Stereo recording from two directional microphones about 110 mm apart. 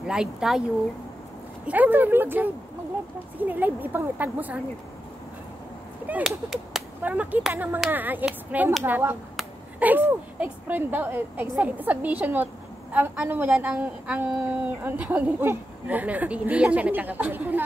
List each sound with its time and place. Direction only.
0.0 s a woman's voice: 5° right (ahead or behind)
1.7 s a woman's voice: 15° right (ahead or behind)
6.2 s whip: centre (ahead or behind)
7.0 s a woman's voice: 15° right (ahead or behind)